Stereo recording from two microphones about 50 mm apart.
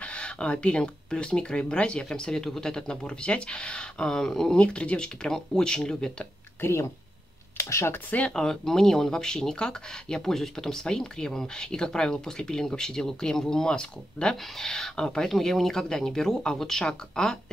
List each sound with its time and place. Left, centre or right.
0.0 s speech: left
4.6 s speech: left
7.5 s speech: left
8.3 s speech: centre